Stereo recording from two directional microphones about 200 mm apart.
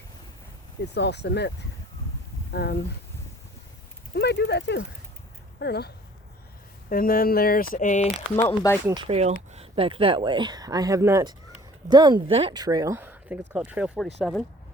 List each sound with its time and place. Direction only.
0.9 s speech: 60° left (ahead or behind)
4.1 s speech: 55° left (ahead or behind)
6.9 s speech: 45° left (ahead or behind)
8.4 s speech: 10° left (ahead or behind)
9.0 s speech: 30° right (ahead or behind); by 14.1 s 5° right (ahead or behind)